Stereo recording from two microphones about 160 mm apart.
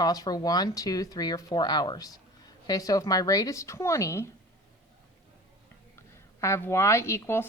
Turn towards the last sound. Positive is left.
turn(degrees=15)  # may be behind; listen again after turning